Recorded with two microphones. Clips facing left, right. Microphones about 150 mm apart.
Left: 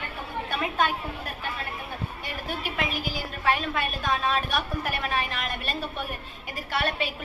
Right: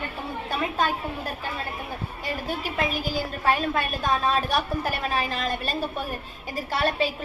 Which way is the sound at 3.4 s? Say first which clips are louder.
Right 2 dB; 40° right (ahead or behind).